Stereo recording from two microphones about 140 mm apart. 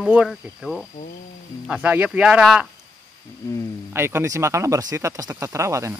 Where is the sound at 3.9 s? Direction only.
15° right (ahead or behind).